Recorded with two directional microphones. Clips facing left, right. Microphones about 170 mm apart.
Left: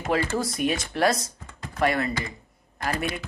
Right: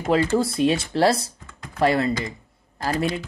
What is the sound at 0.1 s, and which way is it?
Speech, 30° right (ahead or behind).